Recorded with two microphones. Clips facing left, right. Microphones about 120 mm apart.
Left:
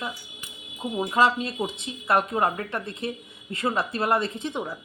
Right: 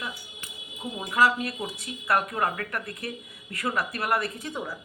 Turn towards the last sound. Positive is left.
turn(degrees=20)  # may be behind; listen again after turning